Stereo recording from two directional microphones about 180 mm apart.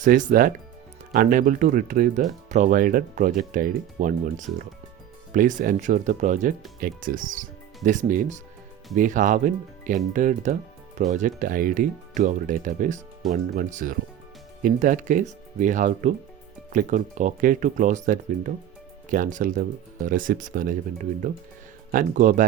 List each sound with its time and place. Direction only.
0.0 s speech: 45° right (ahead or behind)